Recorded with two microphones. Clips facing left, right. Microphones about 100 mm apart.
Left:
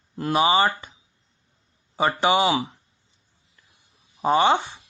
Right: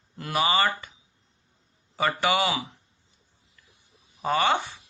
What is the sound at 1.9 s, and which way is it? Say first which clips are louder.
Speech: left 4 dB; 25° left (ahead or behind).